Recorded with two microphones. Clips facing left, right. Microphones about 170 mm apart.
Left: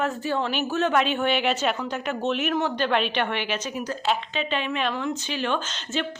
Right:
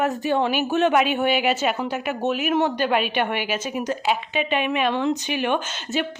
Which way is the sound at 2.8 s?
10° right (ahead or behind).